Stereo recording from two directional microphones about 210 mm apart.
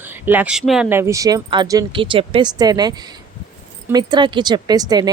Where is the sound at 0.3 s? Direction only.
5° right (ahead or behind).